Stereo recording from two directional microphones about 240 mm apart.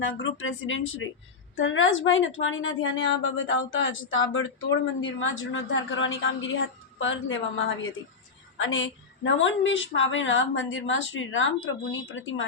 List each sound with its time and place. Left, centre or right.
0.0 s a woman's voice: left